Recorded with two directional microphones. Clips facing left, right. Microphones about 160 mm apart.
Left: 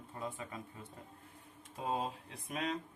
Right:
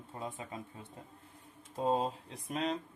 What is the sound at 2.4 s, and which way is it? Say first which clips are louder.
Speech: right 3 dB; 30° right (ahead or behind).